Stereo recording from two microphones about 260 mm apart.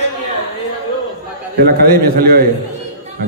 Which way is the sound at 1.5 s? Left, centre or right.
Right.